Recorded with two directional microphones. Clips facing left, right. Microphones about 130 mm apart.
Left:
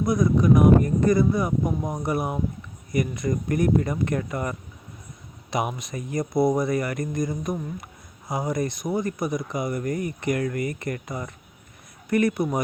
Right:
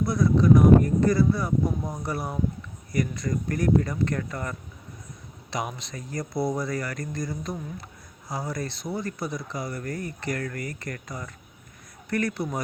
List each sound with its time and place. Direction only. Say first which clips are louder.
0.0 s speech: left 1 dB; 20° left (ahead or behind)